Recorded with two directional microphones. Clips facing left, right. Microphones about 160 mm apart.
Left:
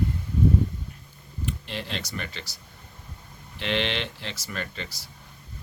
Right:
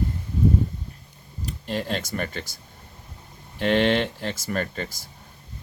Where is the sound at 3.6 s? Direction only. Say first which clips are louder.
Right 8 dB; 45° right (ahead or behind).